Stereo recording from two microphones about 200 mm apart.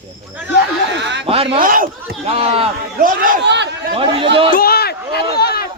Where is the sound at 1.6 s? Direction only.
45° right (ahead or behind).